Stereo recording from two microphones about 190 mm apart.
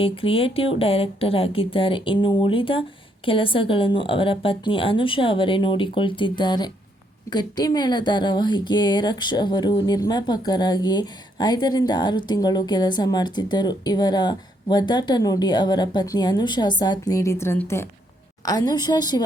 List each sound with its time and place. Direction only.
0.0 s a woman's voice: 30° left (ahead or behind)